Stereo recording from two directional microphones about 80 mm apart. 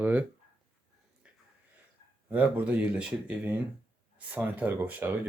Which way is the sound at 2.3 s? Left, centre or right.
Centre.